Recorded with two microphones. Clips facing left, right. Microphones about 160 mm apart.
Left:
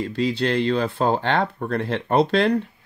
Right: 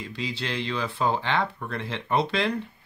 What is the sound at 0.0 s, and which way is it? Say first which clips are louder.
Speech: left 10 dB; 50° left (ahead or behind).